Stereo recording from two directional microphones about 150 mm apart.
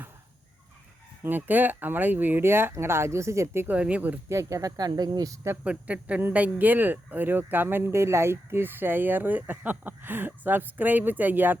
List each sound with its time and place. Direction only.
1.2 s speech: 10° right (ahead or behind)
5.6 s speech: 10° right (ahead or behind)